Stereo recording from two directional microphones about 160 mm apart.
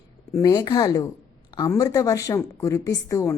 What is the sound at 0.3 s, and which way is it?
A woman's voice, 25° left (ahead or behind).